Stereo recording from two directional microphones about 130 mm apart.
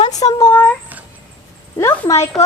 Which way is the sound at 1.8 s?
25° left (ahead or behind).